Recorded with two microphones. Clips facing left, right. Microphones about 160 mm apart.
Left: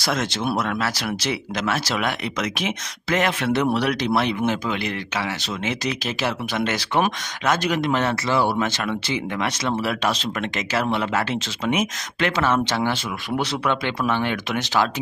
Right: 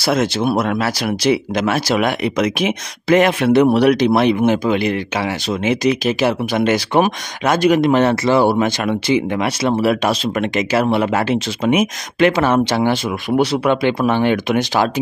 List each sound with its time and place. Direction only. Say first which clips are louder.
0.1 s speech: right 7 dB; 10° right (ahead or behind)
8.1 s speech: right 7 dB; 55° right (ahead or behind)
8.5 s speech: right 7 dB; 15° right (ahead or behind)